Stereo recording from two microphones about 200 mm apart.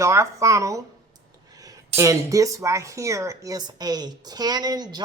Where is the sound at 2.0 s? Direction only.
15° right (ahead or behind).